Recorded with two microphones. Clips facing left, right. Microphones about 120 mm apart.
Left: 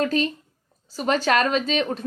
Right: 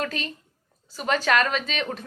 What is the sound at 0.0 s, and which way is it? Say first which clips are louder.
A woman's voice: left 8 dB; 35° left (ahead or behind).